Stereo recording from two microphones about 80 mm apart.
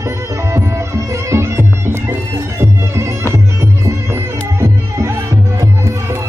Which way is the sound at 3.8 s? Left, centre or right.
Right.